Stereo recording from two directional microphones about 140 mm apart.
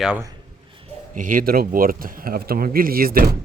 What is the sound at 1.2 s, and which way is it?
Speech, 75° right (ahead or behind).